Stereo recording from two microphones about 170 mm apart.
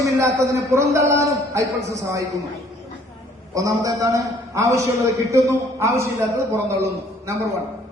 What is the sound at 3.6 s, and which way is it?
A man's voice, 20° right (ahead or behind).